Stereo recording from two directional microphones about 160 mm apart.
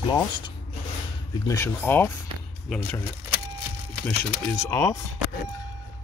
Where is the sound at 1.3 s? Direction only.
20° left (ahead or behind).